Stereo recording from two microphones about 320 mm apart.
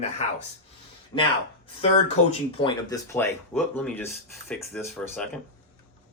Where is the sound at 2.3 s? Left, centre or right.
Centre.